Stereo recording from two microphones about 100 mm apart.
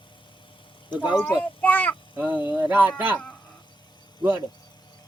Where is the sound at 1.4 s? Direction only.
15° left (ahead or behind).